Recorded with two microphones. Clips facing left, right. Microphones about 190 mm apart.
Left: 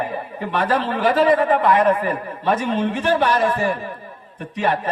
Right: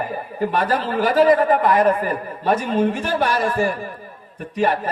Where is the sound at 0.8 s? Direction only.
10° right (ahead or behind).